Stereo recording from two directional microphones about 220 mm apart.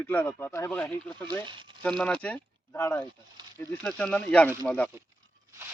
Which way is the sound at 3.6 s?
5° left (ahead or behind).